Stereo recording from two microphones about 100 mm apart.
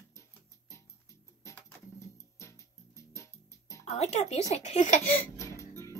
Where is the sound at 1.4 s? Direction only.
30° left (ahead or behind).